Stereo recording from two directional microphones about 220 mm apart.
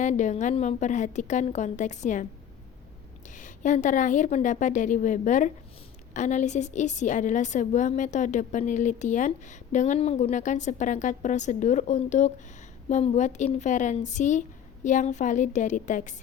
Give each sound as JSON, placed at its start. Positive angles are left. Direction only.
{"t": 0.0, "sound": "a woman's voice", "side_deg": 35}
{"t": 3.2, "sound": "a woman's voice", "side_deg": 35}